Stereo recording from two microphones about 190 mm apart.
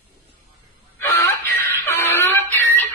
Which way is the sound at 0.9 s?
15° left (ahead or behind).